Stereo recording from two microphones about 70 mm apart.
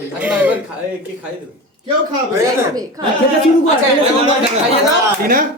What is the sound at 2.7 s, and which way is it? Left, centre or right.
Speech, right.